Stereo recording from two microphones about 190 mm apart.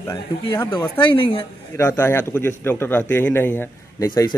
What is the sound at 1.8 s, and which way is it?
A man's voice, 15° left (ahead or behind).